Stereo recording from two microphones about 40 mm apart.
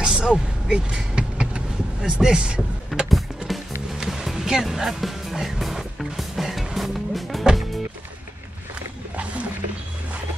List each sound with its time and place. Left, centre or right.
0.0 s vehicle: centre
3.1 s music: centre
9.1 s music: right